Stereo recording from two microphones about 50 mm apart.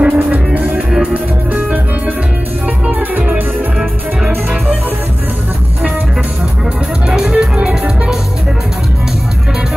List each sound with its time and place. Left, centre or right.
0.0 s music: right
2.9 s music: right
7.1 s music: centre